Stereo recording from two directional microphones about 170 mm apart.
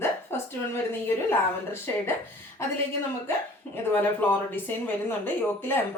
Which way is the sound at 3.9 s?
10° left (ahead or behind).